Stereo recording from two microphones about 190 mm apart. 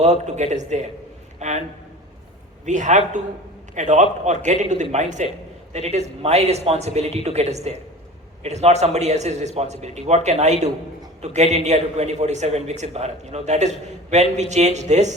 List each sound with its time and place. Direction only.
0.0 s a man's voice: 35° right (ahead or behind)
1.4 s a sound: 35° right (ahead or behind)
2.6 s a man's voice: 40° right (ahead or behind)